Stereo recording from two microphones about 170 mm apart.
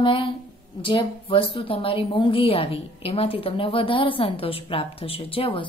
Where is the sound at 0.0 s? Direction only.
30° left (ahead or behind).